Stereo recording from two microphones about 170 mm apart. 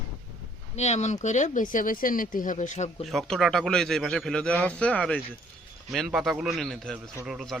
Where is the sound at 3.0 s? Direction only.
Centre (ahead or behind).